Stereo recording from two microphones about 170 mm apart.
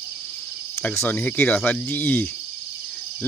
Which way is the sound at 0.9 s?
10° left (ahead or behind).